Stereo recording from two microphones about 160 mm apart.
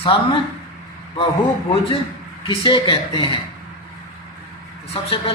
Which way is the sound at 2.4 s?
30° left (ahead or behind).